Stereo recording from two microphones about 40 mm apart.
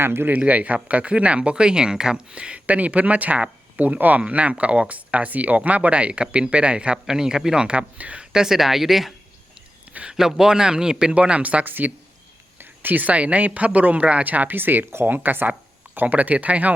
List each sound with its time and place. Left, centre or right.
0.0 s speech: right
0.3 s speech: right
8.2 s a sound: centre
8.5 s speech: centre
9.9 s a sound: right
10.2 s speech: centre
11.1 s speech: right
11.6 s speech: right
12.5 s a sound: right
13.1 s speech: right
14.3 s speech: right
16.0 s speech: right